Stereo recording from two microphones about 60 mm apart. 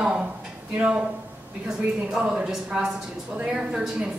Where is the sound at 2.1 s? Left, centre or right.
Centre.